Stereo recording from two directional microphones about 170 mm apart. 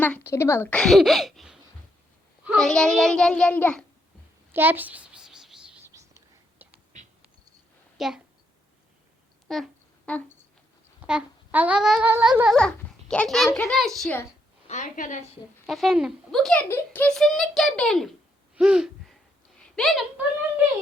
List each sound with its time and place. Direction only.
0.0 s a woman's voice: 10° left (ahead or behind)
4.5 s a sound: 10° right (ahead or behind)
5.9 s whispering: 20° right (ahead or behind)
6.9 s a sound: 45° right (ahead or behind)
7.9 s a woman's voice: centre (ahead or behind)
9.5 s speech: centre (ahead or behind)
11.0 s babbling: 5° right (ahead or behind)
13.5 s speech: 5° left (ahead or behind)
14.7 s a woman's voice: 50° left (ahead or behind)
15.6 s speech: centre (ahead or behind)
18.5 s a sound: 5° right (ahead or behind)
19.7 s speech: centre (ahead or behind)